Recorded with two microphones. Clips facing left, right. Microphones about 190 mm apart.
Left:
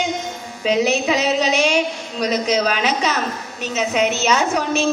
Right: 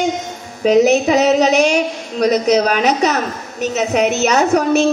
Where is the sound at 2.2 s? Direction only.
50° right (ahead or behind).